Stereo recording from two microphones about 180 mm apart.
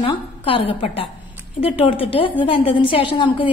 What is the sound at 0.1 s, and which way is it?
A woman's voice, 30° left (ahead or behind).